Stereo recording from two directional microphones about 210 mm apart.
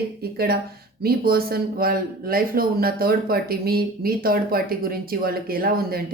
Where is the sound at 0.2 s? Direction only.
45° right (ahead or behind).